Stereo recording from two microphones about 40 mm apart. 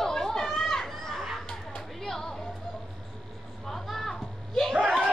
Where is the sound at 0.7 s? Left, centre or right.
Centre.